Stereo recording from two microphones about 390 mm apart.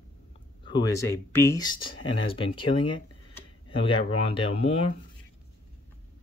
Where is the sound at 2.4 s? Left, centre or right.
Left.